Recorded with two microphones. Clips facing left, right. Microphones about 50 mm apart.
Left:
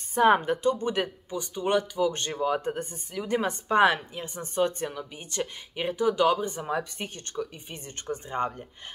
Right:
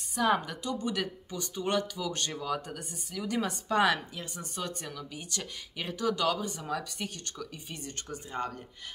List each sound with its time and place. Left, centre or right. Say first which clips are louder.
0.1 s speech: left 7 dB; left
1.3 s speech: left 5 dB; centre